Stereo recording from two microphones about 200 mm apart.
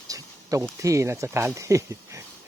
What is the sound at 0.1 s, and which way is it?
Speech, 15° right (ahead or behind).